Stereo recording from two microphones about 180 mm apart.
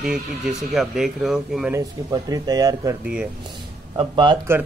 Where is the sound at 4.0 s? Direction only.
25° right (ahead or behind).